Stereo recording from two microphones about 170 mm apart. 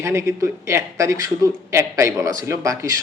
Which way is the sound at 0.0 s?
15° right (ahead or behind).